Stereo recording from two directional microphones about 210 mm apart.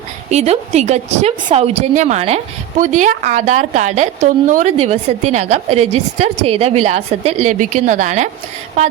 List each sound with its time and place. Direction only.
0.3 s a woman's voice: 30° right (ahead or behind)